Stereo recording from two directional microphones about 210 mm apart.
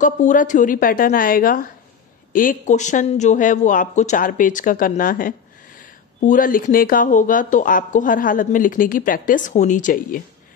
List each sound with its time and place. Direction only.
0.0 s speech: 35° left (ahead or behind)